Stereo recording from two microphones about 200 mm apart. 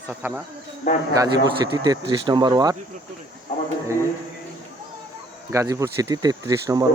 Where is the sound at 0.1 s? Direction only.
10° right (ahead or behind).